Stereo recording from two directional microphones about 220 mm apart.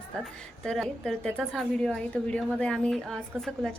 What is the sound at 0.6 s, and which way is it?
A woman's voice, centre (ahead or behind).